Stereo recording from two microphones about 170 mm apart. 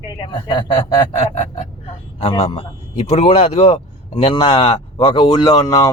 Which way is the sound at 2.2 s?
35° left (ahead or behind).